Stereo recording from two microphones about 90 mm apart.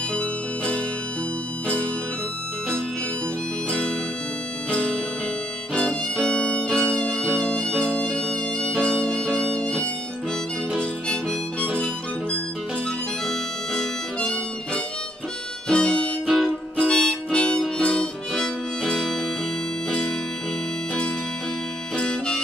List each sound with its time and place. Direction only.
0.1 s music: 10° left (ahead or behind)
4.6 s music: 10° left (ahead or behind)
13.3 s harmonica: 10° left (ahead or behind)
21.9 s harmonica: 10° left (ahead or behind)